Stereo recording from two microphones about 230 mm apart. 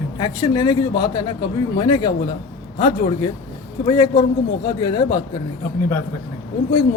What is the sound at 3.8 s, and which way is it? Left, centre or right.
A man's voice, centre.